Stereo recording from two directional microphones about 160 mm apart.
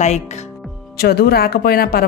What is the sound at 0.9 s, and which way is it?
A woman's voice, 75° left (ahead or behind).